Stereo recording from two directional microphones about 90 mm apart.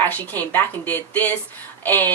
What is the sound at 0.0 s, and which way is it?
Speech, 20° left (ahead or behind).